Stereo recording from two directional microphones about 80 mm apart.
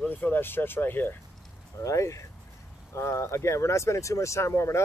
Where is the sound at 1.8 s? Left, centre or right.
Left.